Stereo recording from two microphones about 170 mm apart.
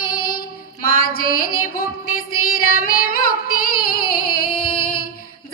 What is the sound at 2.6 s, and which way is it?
Female singing, 60° left (ahead or behind).